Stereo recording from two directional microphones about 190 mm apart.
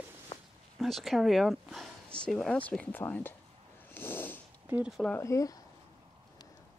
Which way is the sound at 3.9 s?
10° left (ahead or behind).